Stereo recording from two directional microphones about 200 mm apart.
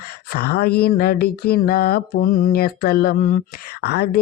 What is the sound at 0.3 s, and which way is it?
Mantra, 50° left (ahead or behind).